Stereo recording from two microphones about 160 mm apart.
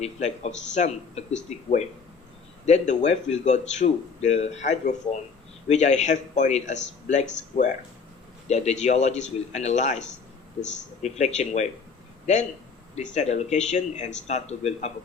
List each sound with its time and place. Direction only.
0.0 s speech: 45° left (ahead or behind)